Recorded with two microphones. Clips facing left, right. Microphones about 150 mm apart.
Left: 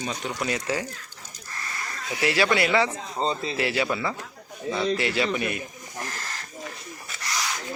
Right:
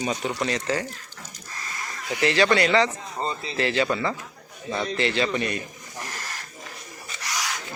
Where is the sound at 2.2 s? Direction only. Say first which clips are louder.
Right 2 dB; 10° left (ahead or behind).